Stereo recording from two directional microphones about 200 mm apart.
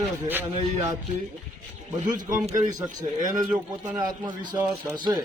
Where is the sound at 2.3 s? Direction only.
40° right (ahead or behind).